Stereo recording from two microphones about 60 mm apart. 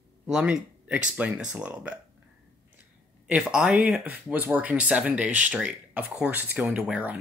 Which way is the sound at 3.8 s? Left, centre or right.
Right.